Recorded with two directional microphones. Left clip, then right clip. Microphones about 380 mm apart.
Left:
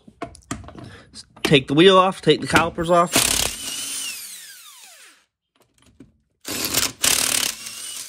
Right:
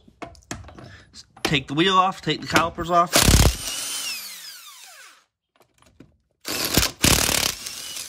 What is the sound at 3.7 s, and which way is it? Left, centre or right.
Drill, centre.